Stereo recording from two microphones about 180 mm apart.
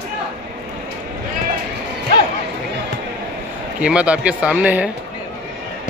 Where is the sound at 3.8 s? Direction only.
5° right (ahead or behind).